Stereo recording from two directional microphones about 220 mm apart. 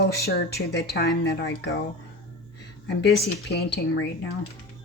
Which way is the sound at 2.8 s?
50° left (ahead or behind).